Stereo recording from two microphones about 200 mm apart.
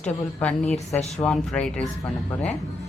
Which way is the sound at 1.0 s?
35° left (ahead or behind).